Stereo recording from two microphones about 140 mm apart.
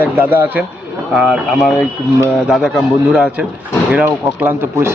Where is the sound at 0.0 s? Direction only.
15° right (ahead or behind).